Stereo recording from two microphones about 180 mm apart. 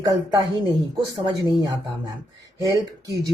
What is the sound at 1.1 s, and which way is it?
Speech, 25° right (ahead or behind).